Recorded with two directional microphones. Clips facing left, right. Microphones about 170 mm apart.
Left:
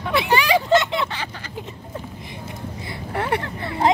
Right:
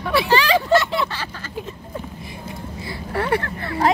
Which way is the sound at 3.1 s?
20° left (ahead or behind).